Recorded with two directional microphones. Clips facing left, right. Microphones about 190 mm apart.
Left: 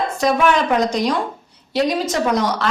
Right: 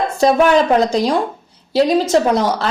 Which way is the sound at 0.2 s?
35° right (ahead or behind).